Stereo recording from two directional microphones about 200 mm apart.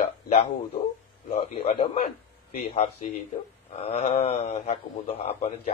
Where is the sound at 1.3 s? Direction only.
30° left (ahead or behind).